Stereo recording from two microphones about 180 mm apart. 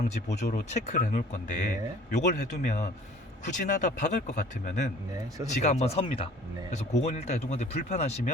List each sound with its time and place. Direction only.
0.3 s speech: 70° left (ahead or behind)
0.5 s speech: 40° left (ahead or behind)